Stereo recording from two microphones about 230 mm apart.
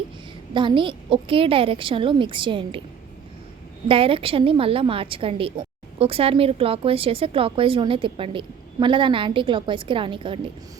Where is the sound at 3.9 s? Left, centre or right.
Right.